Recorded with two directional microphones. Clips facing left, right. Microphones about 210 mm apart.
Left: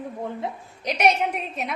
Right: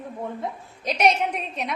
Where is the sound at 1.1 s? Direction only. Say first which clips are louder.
Even; 5° left (ahead or behind).